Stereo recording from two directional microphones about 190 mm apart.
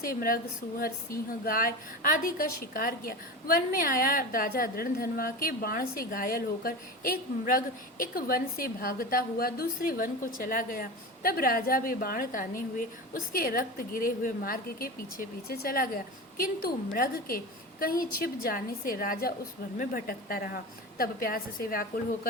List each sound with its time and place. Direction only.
0.0 s a woman's voice: 50° left (ahead or behind)
1.5 s a woman's voice: 50° left (ahead or behind)